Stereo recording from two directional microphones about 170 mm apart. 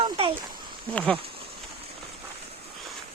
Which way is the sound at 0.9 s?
10° left (ahead or behind).